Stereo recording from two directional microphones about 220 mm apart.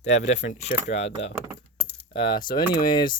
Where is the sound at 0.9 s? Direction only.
30° left (ahead or behind).